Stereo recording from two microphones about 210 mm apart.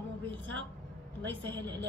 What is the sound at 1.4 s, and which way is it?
Speech, 20° right (ahead or behind).